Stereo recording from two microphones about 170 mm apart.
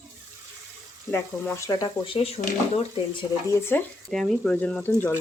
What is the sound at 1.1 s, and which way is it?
Speech, 15° left (ahead or behind).